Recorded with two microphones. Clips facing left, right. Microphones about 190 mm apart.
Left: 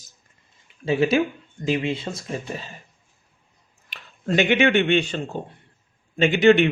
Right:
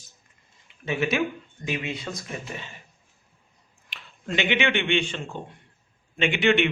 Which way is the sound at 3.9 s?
40° left (ahead or behind).